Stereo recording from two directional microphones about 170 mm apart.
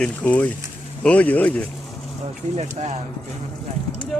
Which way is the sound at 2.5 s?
40° right (ahead or behind).